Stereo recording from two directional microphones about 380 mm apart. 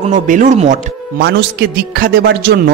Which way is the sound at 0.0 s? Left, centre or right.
Centre.